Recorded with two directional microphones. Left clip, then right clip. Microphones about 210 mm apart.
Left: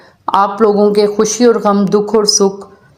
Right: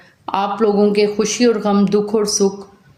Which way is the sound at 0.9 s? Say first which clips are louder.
Left 5 dB; 20° left (ahead or behind).